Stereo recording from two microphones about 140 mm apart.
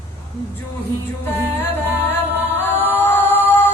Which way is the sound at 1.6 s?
15° left (ahead or behind).